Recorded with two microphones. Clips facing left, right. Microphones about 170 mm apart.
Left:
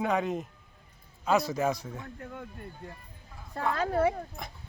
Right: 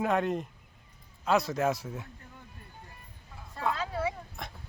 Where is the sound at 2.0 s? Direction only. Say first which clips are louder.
Left 10 dB; 70° left (ahead or behind).